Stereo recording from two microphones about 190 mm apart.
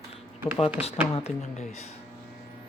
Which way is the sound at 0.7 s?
30° left (ahead or behind).